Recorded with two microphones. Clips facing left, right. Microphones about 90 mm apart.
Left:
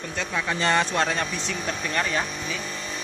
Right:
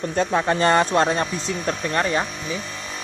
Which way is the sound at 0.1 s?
40° right (ahead or behind).